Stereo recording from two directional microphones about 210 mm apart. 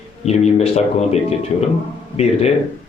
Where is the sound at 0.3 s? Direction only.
30° left (ahead or behind).